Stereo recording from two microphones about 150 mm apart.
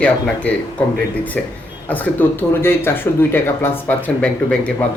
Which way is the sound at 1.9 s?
10° left (ahead or behind).